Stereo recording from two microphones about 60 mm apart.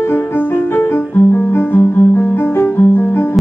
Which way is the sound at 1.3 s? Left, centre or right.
Left.